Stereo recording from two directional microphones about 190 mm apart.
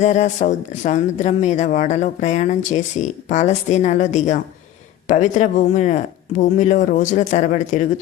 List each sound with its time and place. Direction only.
0.0 s speech: 40° left (ahead or behind)